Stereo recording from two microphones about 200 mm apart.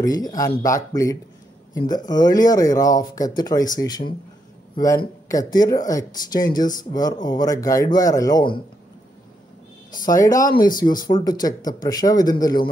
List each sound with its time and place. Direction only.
0.0 s speech: 20° left (ahead or behind)
5.3 s speech: 20° left (ahead or behind)
10.0 s speech: 15° left (ahead or behind)